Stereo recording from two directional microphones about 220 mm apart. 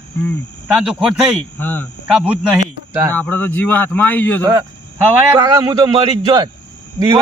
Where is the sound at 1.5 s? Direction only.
10° left (ahead or behind).